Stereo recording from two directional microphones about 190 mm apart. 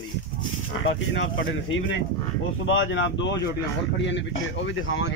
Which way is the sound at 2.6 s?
90° left.